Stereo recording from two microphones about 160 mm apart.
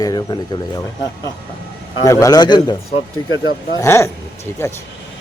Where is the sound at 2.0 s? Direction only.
20° left (ahead or behind).